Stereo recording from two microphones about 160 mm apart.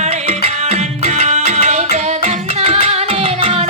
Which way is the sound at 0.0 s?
45° right (ahead or behind).